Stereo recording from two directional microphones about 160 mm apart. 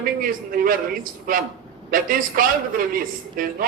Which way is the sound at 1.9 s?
60° right (ahead or behind).